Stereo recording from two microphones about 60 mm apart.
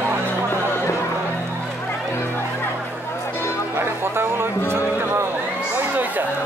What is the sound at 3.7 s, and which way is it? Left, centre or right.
Music, right.